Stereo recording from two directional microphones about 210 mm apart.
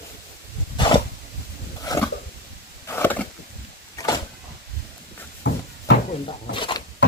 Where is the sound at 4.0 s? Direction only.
15° left (ahead or behind).